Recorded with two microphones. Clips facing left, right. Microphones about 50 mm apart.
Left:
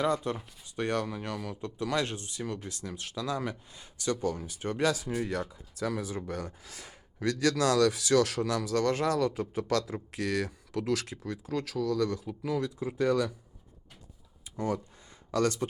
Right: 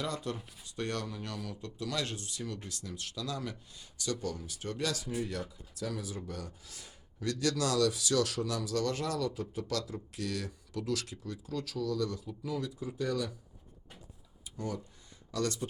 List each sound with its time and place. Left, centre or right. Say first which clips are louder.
0.0 s speech: left 8 dB; left
0.3 s speech: left 4 dB; centre
5.0 s speech: left 4 dB; left
14.5 s speech: left 7 dB; left